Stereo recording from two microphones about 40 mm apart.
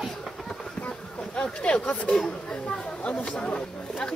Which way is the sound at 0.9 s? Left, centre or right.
Centre.